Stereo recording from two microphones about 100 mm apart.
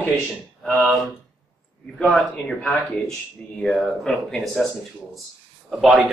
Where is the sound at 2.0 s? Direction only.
10° left (ahead or behind).